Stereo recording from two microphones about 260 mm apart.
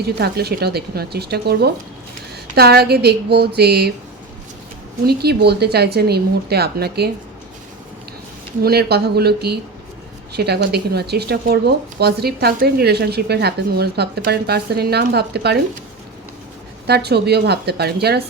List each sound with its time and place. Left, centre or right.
0.0 s speech: right
5.0 s speech: right
8.6 s speech: right
16.8 s speech: right